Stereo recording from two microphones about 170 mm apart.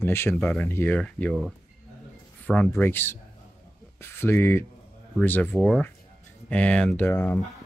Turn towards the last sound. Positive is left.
turn(degrees=10)  # may be behind; listen again after turning